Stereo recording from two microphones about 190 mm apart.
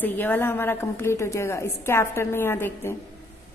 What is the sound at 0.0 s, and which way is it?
A woman's voice, 10° left (ahead or behind).